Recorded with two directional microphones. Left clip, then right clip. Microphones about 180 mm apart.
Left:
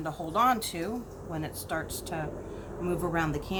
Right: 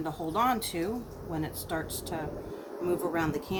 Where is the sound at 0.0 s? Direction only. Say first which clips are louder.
Left 2 dB; 40° left (ahead or behind).